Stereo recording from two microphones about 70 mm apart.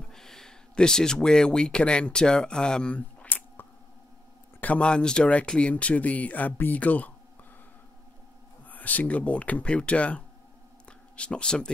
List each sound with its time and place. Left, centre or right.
0.1 s speech: centre; by 7.1 s left
8.6 s speech: left
10.9 s a sound: centre